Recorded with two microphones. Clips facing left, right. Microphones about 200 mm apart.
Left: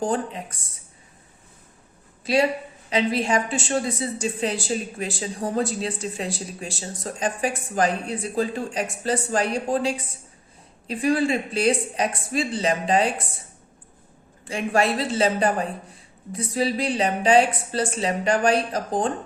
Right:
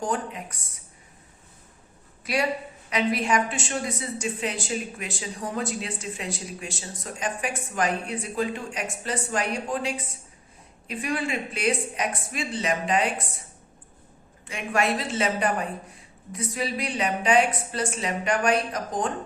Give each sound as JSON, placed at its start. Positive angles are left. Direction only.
{"t": 0.0, "sound": "a woman's voice", "side_deg": 30}
{"t": 2.2, "sound": "a woman's voice", "side_deg": 25}
{"t": 14.4, "sound": "a woman's voice", "side_deg": 30}